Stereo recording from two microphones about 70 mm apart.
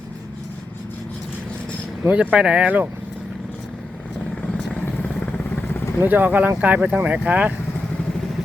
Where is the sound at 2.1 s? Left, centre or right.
Centre.